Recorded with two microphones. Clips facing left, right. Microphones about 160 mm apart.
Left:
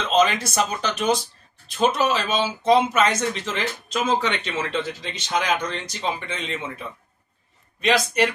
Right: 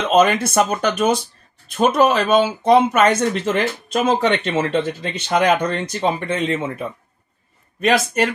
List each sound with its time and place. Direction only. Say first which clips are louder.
0.1 s speech: right 5 dB; 55° right (ahead or behind)
7.8 s speech: right 3 dB; 50° right (ahead or behind)